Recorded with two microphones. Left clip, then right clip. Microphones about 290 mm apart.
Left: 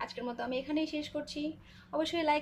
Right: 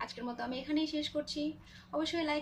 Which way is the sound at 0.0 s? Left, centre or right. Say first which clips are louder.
Left 2 dB; centre.